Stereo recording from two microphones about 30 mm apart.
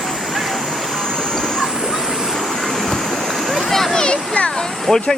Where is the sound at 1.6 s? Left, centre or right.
Centre.